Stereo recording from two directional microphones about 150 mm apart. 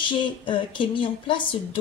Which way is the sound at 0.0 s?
35° left (ahead or behind).